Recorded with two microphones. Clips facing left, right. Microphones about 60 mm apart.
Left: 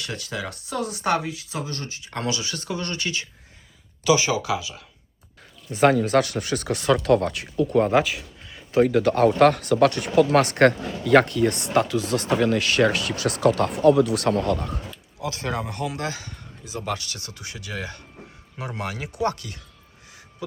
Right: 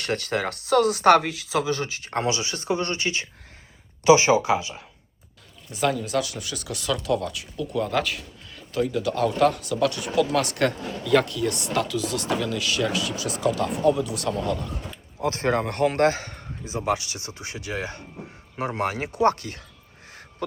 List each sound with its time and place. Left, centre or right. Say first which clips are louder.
0.0 s speech: right 5 dB; right
2.1 s speech: right 2 dB; right
5.7 s speech: left 6 dB; left
7.0 s speech: left 6 dB; left
8.8 s speech: left 6 dB; left
15.2 s speech: right 5 dB; right
15.6 s a man's voice: right 8 dB; right
16.7 s speech: right 4 dB; centre; by 19.6 s right